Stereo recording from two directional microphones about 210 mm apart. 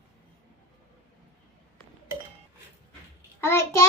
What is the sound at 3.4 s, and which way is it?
Speech, 10° left (ahead or behind).